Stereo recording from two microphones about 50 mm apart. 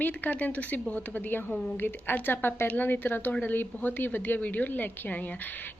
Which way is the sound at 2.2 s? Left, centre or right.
Left.